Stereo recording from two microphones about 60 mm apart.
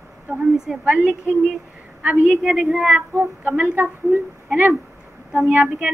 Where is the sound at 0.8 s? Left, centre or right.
Right.